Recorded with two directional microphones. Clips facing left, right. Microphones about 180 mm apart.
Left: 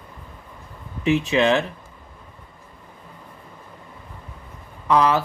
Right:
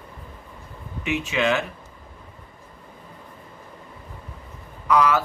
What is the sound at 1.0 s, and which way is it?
Speech, 35° left (ahead or behind).